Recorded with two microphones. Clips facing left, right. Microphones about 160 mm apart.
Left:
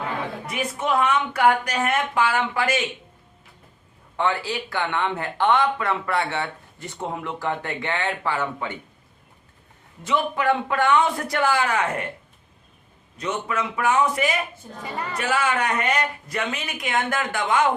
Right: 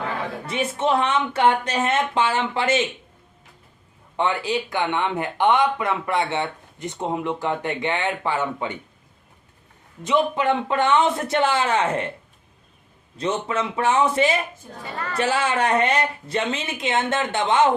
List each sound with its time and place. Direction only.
0.4 s speech: 30° right (ahead or behind)
4.2 s speech: 20° right (ahead or behind)
10.0 s speech: 20° right (ahead or behind)
13.1 s speech: 30° right (ahead or behind)
14.9 s speech: 15° left (ahead or behind)
15.2 s speech: 30° right (ahead or behind)